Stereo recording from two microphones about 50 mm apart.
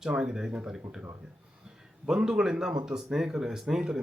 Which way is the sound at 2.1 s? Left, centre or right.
Centre.